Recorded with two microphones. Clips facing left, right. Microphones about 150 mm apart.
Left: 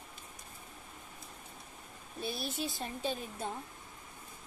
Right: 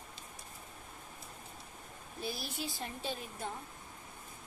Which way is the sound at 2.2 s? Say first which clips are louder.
Left 3 dB; 25° left (ahead or behind).